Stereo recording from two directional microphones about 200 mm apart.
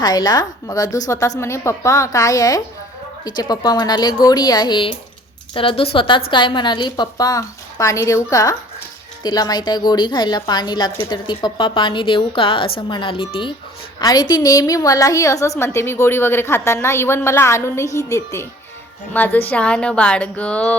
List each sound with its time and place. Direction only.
0.0 s a woman's voice: 20° left (ahead or behind)